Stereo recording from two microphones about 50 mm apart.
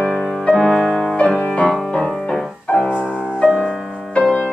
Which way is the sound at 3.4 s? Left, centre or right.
Centre.